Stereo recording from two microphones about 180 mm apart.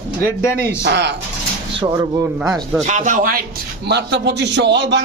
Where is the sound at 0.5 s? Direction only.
70° right (ahead or behind).